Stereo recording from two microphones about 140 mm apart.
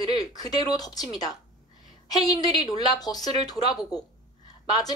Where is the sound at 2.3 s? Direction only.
25° left (ahead or behind).